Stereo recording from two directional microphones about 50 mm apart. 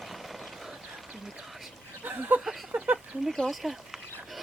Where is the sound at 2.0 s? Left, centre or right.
Right.